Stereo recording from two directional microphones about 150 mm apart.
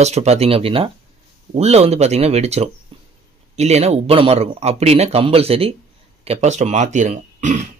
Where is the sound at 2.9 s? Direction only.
40° right (ahead or behind).